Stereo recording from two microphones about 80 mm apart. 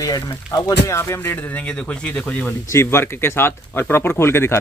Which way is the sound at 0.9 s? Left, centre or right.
Left.